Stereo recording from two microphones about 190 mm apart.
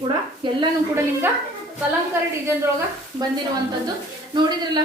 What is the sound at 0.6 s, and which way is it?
Speech, 15° right (ahead or behind).